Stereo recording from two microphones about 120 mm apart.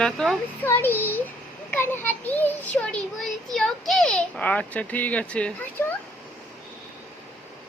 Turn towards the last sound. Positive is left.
turn(degrees=10)  # may be behind; listen again after turning